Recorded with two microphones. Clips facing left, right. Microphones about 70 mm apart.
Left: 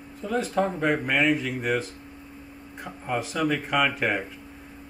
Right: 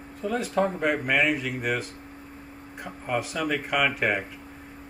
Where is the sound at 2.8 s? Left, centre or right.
Centre.